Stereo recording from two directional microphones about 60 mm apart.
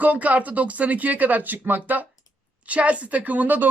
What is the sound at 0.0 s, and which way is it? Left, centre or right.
Speech, right.